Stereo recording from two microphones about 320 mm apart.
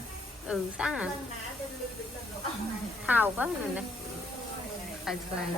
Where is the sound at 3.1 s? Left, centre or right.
Centre.